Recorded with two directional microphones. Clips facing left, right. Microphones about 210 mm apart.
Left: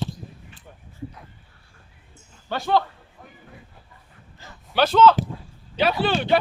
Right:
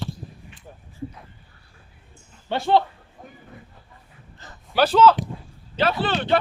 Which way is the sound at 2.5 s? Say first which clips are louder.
Right 2 dB; 25° right (ahead or behind).